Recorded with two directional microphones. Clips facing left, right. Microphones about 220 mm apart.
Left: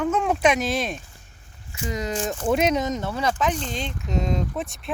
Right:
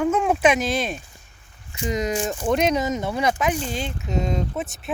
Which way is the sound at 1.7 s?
20° right (ahead or behind).